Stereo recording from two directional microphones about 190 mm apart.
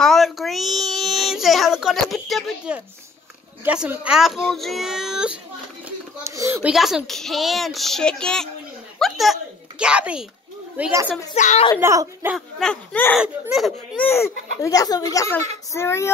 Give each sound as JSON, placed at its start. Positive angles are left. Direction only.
{"t": 0.0, "sound": "a sound", "side_deg": 0}
{"t": 3.6, "sound": "a child's voice", "side_deg": -5}
{"t": 5.9, "sound": "a sound", "side_deg": -15}
{"t": 6.7, "sound": "a child's voice", "side_deg": 0}
{"t": 11.3, "sound": "a woman's voice", "side_deg": 40}
{"t": 11.8, "sound": "speech", "side_deg": -15}
{"t": 12.4, "sound": "a child's voice", "side_deg": 5}
{"t": 14.0, "sound": "speech", "side_deg": 15}